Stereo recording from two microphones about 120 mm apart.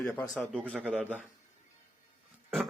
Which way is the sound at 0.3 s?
5° right (ahead or behind).